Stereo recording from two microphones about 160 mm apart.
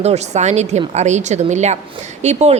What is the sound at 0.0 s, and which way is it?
A woman's voice, 45° right (ahead or behind).